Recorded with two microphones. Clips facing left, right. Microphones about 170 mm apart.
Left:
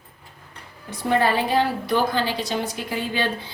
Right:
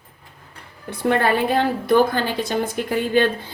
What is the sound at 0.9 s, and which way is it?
A woman's voice, 60° right (ahead or behind).